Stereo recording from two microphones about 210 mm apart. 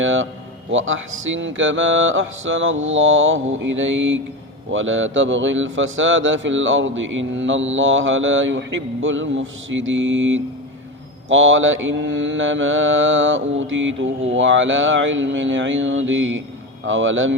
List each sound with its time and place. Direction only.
0.0 s speech: 65° right (ahead or behind)